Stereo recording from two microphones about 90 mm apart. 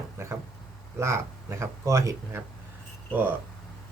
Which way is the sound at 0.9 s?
30° right (ahead or behind).